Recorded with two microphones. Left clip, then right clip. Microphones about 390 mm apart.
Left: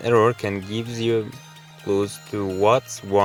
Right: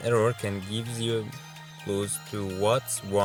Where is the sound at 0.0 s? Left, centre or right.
Right.